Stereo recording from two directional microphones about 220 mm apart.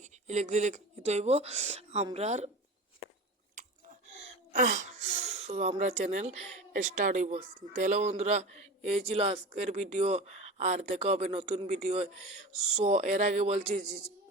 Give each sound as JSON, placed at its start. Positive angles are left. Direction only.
{"t": 0.0, "sound": "speech", "side_deg": -30}
{"t": 3.5, "sound": "chewing", "side_deg": -35}
{"t": 4.5, "sound": "speech", "side_deg": -35}